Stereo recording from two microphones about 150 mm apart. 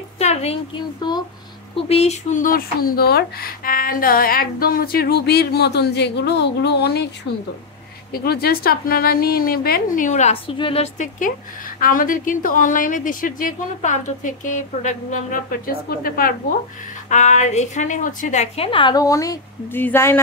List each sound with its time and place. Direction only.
0.2 s a sound: 45° left (ahead or behind)
1.9 s a woman's voice: 45° left (ahead or behind)
2.4 s speech: 75° left (ahead or behind)
8.1 s speech: 90° left; by 10.9 s 40° left (ahead or behind)
11.0 s a woman's voice: 60° left (ahead or behind)
13.7 s a woman's voice: 55° left (ahead or behind); by 16.3 s 75° left (ahead or behind)
17.1 s a woman's voice: 50° left (ahead or behind)
18.7 s a woman's voice: 35° left (ahead or behind); by 20.2 s 15° left (ahead or behind)